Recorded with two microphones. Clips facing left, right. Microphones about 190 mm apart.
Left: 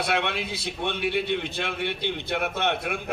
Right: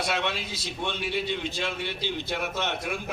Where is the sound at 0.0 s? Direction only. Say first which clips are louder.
Left 2 dB; 60° left (ahead or behind).